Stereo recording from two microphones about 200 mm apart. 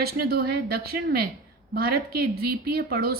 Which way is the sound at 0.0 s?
50° right (ahead or behind).